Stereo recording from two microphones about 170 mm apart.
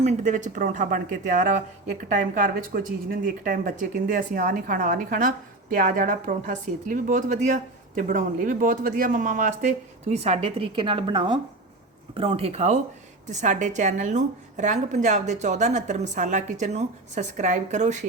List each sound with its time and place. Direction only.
0.0 s a woman's voice: 45° right (ahead or behind)